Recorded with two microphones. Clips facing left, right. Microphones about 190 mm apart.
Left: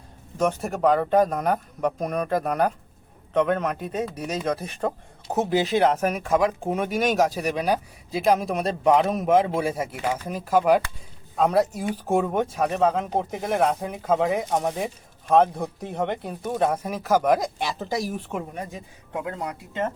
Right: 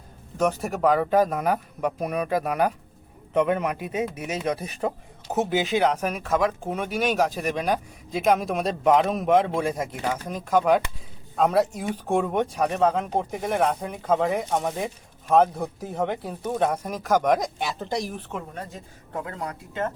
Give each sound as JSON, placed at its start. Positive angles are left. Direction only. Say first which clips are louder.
{"t": 0.3, "sound": "a man's voice", "louder": "even", "side_deg": 0}
{"t": 6.8, "sound": "speech", "louder": "left 1 dB", "side_deg": 45}
{"t": 7.3, "sound": "a man's voice", "louder": "left 1 dB", "side_deg": 5}